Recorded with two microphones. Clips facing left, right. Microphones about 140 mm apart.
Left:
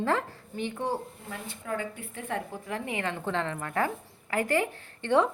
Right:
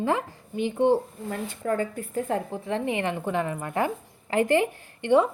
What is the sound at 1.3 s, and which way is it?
A woman's voice, 45° right (ahead or behind).